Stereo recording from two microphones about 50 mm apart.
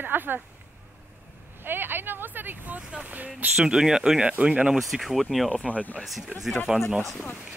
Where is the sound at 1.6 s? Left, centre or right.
Right.